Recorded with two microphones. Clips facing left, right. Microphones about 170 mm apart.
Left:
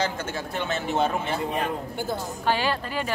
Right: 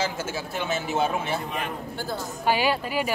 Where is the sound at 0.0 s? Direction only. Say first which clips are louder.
Even; 5° right (ahead or behind).